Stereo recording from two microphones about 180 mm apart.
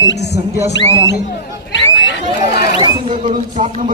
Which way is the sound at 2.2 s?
35° right (ahead or behind).